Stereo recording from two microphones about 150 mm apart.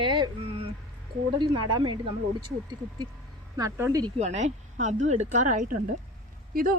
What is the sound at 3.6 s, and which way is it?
Speech, 20° right (ahead or behind).